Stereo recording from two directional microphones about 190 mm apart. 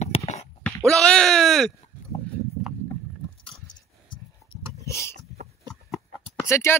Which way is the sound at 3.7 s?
25° left (ahead or behind).